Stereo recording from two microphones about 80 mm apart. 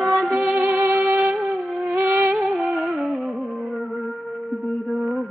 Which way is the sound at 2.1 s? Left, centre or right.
Right.